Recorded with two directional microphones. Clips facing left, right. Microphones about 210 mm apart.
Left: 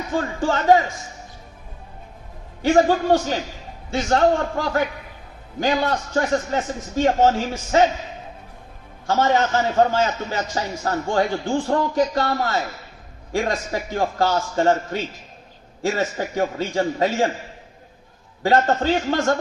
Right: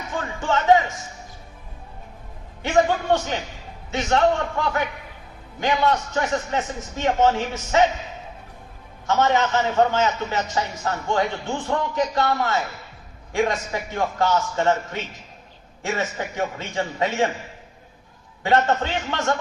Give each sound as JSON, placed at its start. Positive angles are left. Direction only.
{"t": 0.1, "sound": "a man's voice", "side_deg": 35}
{"t": 2.6, "sound": "a man's voice", "side_deg": 35}
{"t": 9.0, "sound": "a man's voice", "side_deg": 35}
{"t": 18.4, "sound": "a man's voice", "side_deg": 35}